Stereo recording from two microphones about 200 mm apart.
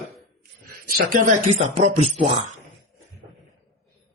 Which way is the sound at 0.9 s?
40° right (ahead or behind).